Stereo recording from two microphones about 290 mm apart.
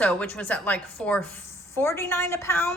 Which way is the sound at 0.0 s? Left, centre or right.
Centre.